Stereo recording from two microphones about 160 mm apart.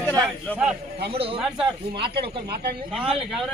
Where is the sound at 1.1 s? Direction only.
35° right (ahead or behind).